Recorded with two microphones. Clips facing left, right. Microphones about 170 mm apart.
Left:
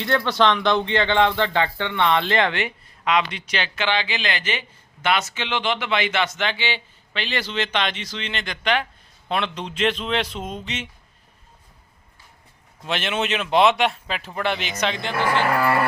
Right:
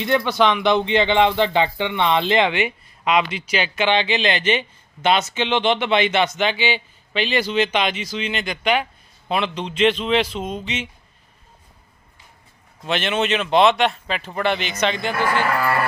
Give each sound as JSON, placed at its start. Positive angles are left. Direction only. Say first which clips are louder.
{"t": 0.3, "sound": "speech", "louder": "even", "side_deg": -10}
{"t": 12.8, "sound": "speech", "louder": "right 3 dB", "side_deg": 0}
{"t": 15.1, "sound": "speech", "louder": "right 1 dB", "side_deg": 20}